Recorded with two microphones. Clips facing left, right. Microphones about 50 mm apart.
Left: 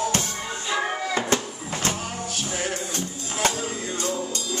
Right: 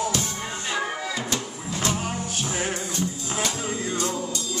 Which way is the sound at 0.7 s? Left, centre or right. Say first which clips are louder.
Left 4 dB; left.